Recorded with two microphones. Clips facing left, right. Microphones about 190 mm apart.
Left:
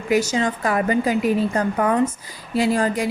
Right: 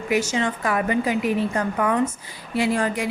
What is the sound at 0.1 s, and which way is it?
A woman's voice, 35° left (ahead or behind).